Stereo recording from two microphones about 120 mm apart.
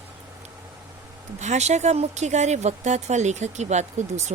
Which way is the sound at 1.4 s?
70° right (ahead or behind).